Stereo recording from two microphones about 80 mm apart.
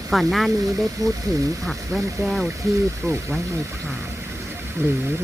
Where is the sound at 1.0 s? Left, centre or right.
Right.